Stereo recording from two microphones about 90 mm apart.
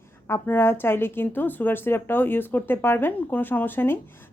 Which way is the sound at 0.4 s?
25° left (ahead or behind).